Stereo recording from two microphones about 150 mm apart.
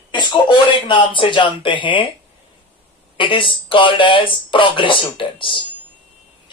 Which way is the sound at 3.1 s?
35° left (ahead or behind).